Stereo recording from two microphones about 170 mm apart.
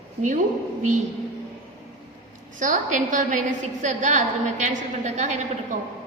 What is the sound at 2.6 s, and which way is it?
A woman's voice, 45° right (ahead or behind).